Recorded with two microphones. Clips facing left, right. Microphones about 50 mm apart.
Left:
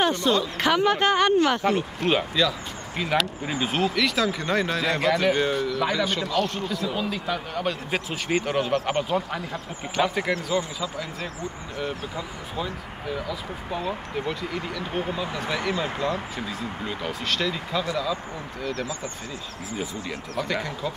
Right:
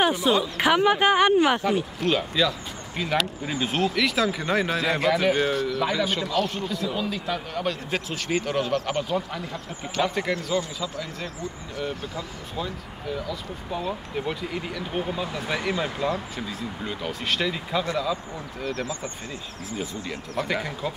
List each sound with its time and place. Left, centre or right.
0.0 s speech: centre
2.0 s speech: centre
8.7 s speech: left
9.1 s speech: centre
11.8 s speech: centre
14.2 s speech: centre
14.9 s speech: centre
15.4 s speech: centre
15.7 s speech: right
16.3 s speech: centre
17.3 s speech: centre
18.6 s speech: right
19.8 s speech: centre